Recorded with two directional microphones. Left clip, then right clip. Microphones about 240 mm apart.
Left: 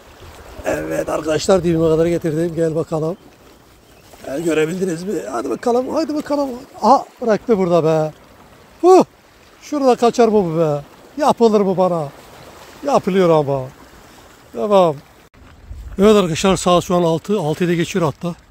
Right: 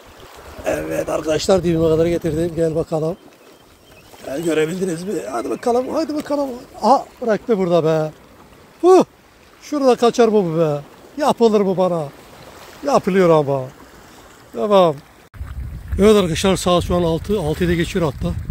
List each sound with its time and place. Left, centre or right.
0.7 s speech: centre
4.2 s speech: centre
16.0 s speech: centre